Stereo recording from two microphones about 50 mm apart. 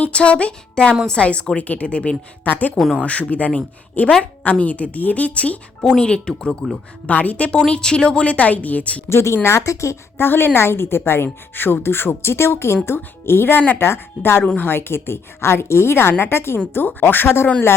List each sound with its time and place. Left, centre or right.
0.0 s a woman's voice: left
2.4 s a woman's voice: left
5.8 s speech: centre
7.1 s a woman's voice: left
7.7 s a woman's voice: centre
9.0 s a woman's voice: left
10.2 s a woman's voice: left
14.4 s a woman's voice: left
14.7 s a woman's voice: left
16.7 s a woman's voice: left